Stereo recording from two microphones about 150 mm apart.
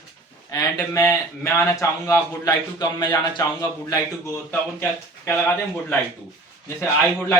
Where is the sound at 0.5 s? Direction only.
20° left (ahead or behind).